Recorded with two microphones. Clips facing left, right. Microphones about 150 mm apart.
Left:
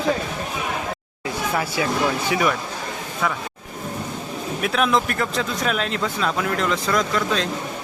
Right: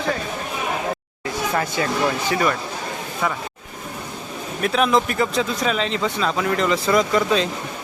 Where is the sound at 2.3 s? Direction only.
5° left (ahead or behind).